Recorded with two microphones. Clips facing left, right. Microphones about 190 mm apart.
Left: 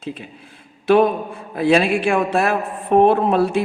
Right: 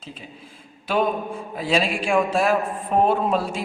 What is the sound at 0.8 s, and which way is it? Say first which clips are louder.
A man's voice: left 8 dB; 65° left (ahead or behind).